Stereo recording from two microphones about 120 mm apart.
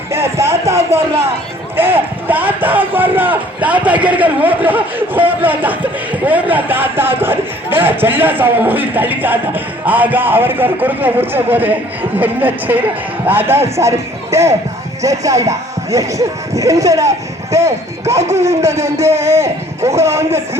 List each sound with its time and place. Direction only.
0.1 s speech: 20° right (ahead or behind)
1.7 s a man's voice: 15° right (ahead or behind)